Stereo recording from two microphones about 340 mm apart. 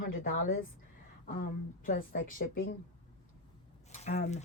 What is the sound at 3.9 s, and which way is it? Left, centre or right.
Speech, centre.